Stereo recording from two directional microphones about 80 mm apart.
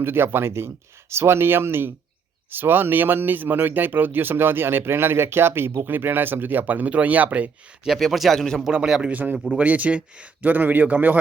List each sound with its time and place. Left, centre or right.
0.0 s speech: right
7.9 s speech: centre
8.6 s a man's voice: centre